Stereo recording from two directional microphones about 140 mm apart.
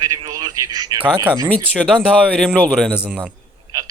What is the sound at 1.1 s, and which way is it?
Speech, 10° right (ahead or behind).